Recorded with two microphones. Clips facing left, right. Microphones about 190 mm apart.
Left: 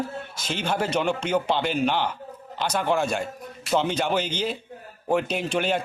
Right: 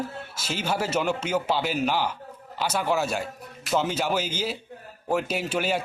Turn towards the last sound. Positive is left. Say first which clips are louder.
# left 1 dB
turn(degrees=-5)  # may be behind; listen again after turning